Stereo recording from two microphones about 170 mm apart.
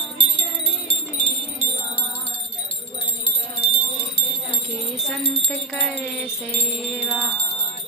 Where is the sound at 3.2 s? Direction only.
35° left (ahead or behind).